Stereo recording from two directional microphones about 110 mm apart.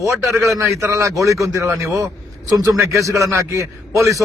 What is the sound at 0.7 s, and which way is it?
A man's voice, 25° right (ahead or behind).